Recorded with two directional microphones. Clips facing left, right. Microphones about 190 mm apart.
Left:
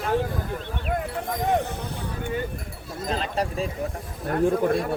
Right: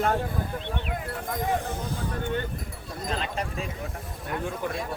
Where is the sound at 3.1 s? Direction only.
35° left (ahead or behind).